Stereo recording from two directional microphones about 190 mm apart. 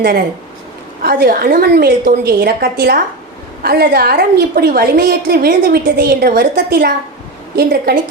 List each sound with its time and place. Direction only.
1.0 s a woman's voice: 55° right (ahead or behind)